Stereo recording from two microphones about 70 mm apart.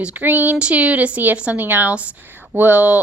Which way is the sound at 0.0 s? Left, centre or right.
Right.